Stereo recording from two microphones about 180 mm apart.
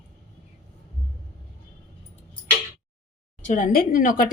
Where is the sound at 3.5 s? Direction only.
45° left (ahead or behind).